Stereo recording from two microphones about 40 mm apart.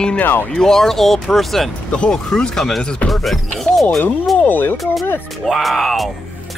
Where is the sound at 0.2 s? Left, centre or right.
Left.